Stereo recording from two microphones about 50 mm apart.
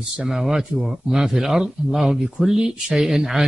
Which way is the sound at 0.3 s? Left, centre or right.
Centre.